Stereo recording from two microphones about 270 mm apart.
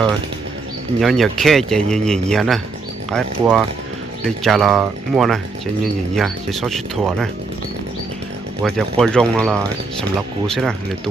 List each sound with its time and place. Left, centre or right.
1.0 s speech: centre
8.6 s speech: centre